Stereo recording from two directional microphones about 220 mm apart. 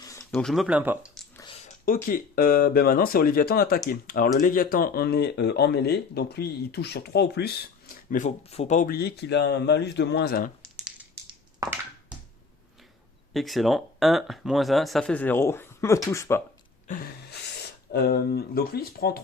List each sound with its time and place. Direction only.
0.0 s a sound: 15° left (ahead or behind)
0.3 s speech: centre (ahead or behind)
1.6 s speech: 40° left (ahead or behind)
11.1 s crushing: 15° right (ahead or behind)
13.3 s speech: centre (ahead or behind)
16.8 s a sound: 40° left (ahead or behind)
17.9 s speech: 45° left (ahead or behind)